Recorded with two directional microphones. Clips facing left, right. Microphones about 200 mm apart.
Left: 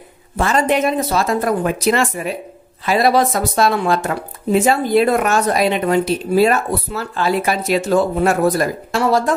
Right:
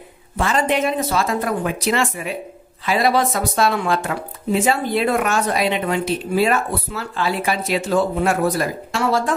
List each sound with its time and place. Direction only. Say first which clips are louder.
0.4 s speech: left 3 dB; 40° left (ahead or behind)